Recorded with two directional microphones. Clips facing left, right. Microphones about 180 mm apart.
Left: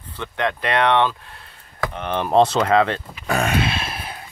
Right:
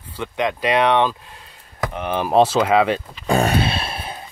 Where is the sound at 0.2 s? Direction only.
10° right (ahead or behind).